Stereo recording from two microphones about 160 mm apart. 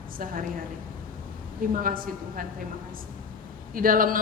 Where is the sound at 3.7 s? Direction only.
60° right (ahead or behind).